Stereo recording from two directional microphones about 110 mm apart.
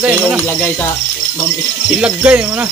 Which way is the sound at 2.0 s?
10° right (ahead or behind).